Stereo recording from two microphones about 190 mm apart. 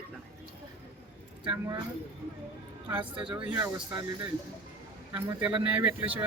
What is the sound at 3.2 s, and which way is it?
Speech, 25° right (ahead or behind).